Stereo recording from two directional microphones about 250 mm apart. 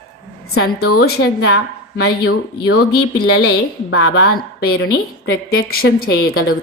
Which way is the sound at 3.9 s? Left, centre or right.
Left.